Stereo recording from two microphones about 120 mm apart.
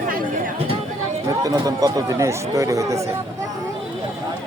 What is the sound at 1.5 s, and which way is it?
Speech, 30° right (ahead or behind).